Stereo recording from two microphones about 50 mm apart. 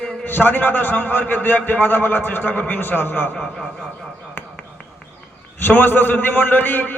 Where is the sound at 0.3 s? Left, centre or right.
Left.